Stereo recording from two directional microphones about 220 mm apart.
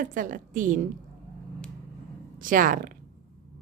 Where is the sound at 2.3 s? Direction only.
40° right (ahead or behind).